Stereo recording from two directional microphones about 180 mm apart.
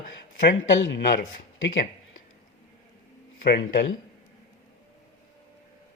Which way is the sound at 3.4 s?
65° left (ahead or behind).